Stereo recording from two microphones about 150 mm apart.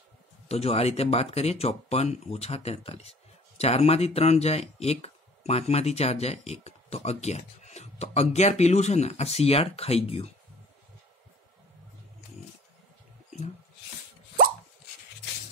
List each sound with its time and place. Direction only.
0.5 s speech: 45° left (ahead or behind)